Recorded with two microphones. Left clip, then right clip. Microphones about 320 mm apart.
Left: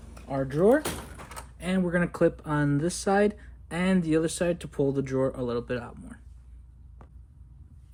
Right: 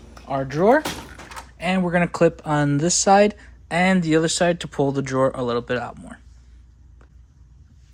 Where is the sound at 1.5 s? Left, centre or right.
Centre.